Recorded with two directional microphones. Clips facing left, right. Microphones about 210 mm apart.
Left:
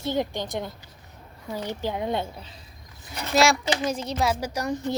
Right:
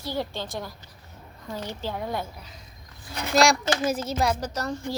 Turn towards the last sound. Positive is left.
turn(degrees=15)  # may be behind; listen again after turning